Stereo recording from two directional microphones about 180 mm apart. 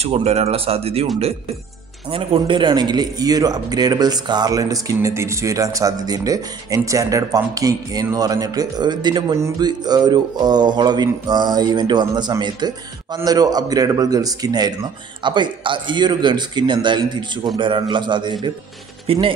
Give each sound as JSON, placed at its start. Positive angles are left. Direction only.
{"t": 0.0, "sound": "speech", "side_deg": -35}
{"t": 2.0, "sound": "a man's voice", "side_deg": -30}